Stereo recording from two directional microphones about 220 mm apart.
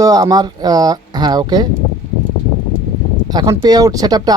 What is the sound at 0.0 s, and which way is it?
Speech, 15° right (ahead or behind).